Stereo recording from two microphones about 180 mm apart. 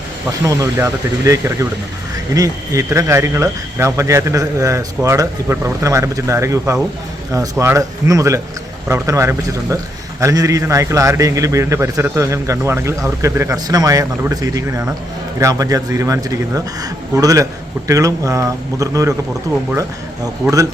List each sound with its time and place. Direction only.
0.4 s a man's voice: 20° right (ahead or behind)
20.4 s a man's voice: 15° right (ahead or behind)